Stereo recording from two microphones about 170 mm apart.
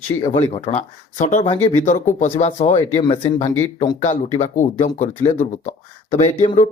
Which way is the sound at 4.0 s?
45° left (ahead or behind).